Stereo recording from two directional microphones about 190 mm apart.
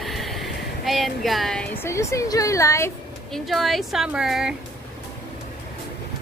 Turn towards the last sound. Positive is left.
turn(degrees=-5)  # may be behind; listen again after turning